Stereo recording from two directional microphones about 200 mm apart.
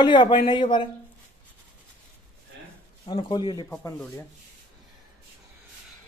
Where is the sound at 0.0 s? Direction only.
25° left (ahead or behind).